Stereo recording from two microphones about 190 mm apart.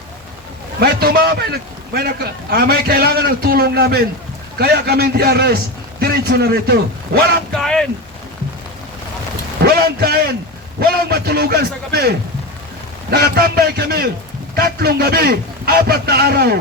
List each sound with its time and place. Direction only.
0.8 s a man's voice: 55° right (ahead or behind)
7.5 s speech: centre (ahead or behind)
9.6 s a man's voice: 50° right (ahead or behind)